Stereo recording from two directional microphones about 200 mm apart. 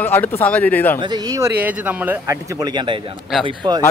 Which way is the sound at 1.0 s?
20° right (ahead or behind).